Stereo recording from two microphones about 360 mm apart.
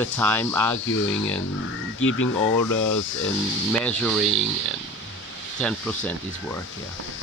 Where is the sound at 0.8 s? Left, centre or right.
Left.